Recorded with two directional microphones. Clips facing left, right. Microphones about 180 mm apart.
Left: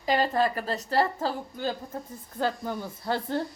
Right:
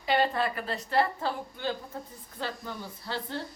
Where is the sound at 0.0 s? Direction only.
40° left (ahead or behind).